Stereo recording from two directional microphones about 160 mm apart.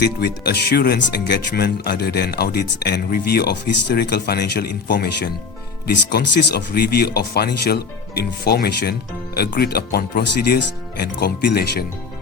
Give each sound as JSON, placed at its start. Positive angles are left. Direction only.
{"t": 0.0, "sound": "speech", "side_deg": 90}